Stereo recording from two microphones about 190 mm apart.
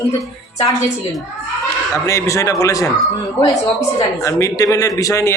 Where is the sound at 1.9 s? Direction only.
15° left (ahead or behind).